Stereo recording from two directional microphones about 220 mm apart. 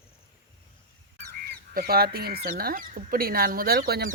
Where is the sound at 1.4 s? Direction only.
45° right (ahead or behind).